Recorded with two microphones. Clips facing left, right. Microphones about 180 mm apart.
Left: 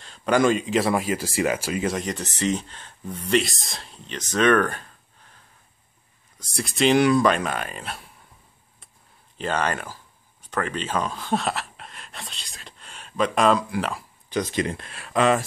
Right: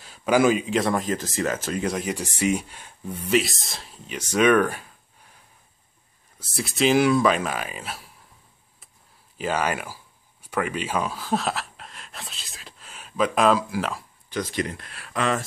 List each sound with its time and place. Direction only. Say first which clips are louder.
0.0 s speech: right 1 dB; 5° right (ahead or behind)
9.4 s speech: even; 5° right (ahead or behind)
14.5 s speech: left 2 dB; 25° left (ahead or behind)